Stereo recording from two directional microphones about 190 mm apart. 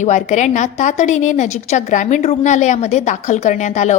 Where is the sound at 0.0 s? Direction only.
40° left (ahead or behind).